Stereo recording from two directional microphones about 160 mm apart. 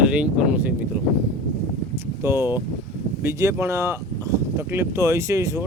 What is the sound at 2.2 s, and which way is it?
Speech, 15° right (ahead or behind).